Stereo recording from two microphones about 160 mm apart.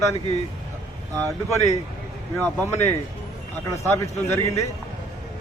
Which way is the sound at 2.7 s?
15° left (ahead or behind).